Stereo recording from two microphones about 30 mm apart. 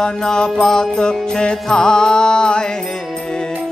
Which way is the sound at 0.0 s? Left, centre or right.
Left.